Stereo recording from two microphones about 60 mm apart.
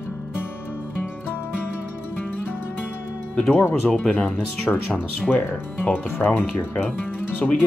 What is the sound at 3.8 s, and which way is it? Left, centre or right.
Speech, centre.